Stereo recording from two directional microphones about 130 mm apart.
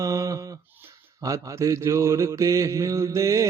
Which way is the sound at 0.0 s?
25° right (ahead or behind).